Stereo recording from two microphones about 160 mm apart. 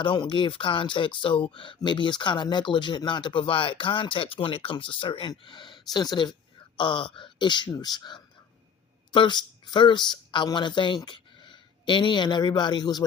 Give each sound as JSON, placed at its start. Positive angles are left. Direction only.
{"t": 0.0, "sound": "speech", "side_deg": 30}